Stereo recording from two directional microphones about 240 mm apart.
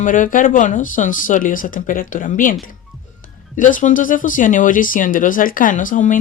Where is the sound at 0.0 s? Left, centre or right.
Left.